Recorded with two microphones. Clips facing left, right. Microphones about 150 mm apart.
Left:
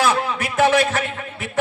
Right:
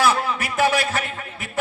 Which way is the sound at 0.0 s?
15° left (ahead or behind).